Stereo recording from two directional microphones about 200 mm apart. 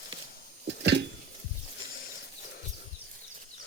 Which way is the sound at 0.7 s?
60° right (ahead or behind).